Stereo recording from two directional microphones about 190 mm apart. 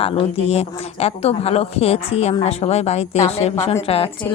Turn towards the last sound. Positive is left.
turn(degrees=30)  # may be behind; listen again after turning